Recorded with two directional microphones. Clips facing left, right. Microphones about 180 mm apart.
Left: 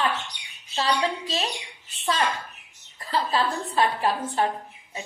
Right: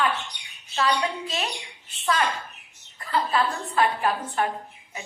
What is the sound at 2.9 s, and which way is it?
A woman's voice, 30° left (ahead or behind).